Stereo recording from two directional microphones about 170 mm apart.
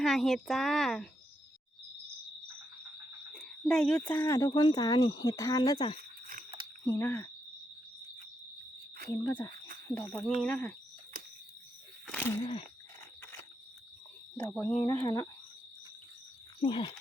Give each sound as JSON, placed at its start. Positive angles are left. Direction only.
{"t": 0.0, "sound": "a child's voice", "side_deg": 0}
{"t": 3.3, "sound": "speech", "side_deg": 5}
{"t": 6.0, "sound": "a sound", "side_deg": -55}
{"t": 6.8, "sound": "speech", "side_deg": 15}
{"t": 9.0, "sound": "speech", "side_deg": 15}
{"t": 12.0, "sound": "a sound", "side_deg": 10}
{"t": 14.3, "sound": "speech", "side_deg": 5}
{"t": 16.6, "sound": "speech", "side_deg": 25}